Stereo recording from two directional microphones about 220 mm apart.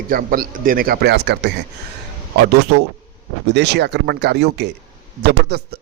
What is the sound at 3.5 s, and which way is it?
A man's voice, 50° right (ahead or behind).